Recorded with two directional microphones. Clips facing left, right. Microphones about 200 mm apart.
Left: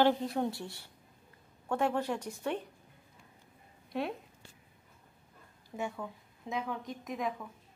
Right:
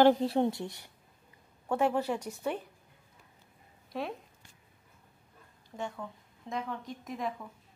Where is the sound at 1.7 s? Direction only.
10° right (ahead or behind).